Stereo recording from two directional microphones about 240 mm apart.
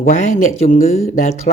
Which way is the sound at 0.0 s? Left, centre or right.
Left.